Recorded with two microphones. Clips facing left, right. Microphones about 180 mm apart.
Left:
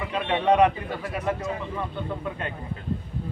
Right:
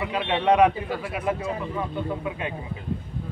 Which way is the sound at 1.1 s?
10° right (ahead or behind).